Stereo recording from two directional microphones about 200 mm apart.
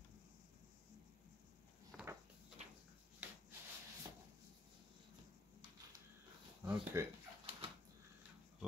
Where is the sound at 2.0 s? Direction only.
5° right (ahead or behind).